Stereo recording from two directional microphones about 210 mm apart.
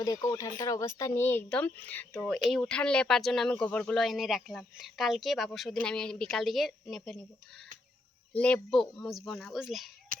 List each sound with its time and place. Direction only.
0.0 s speech: 15° left (ahead or behind); by 7.2 s centre (ahead or behind)
8.3 s speech: 5° left (ahead or behind)
10.1 s a sound: 40° right (ahead or behind)